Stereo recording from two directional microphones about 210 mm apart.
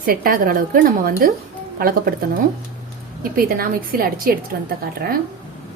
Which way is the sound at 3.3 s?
45° right (ahead or behind).